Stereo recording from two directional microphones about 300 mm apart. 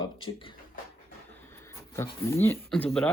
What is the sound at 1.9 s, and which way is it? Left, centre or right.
Speech, centre.